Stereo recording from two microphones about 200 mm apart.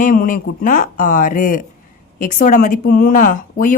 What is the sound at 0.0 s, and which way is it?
Speech, 45° left (ahead or behind).